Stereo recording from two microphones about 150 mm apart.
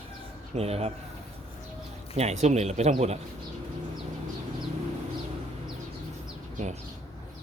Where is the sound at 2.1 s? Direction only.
45° right (ahead or behind).